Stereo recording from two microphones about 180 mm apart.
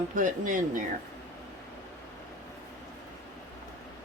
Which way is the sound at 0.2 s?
45° right (ahead or behind).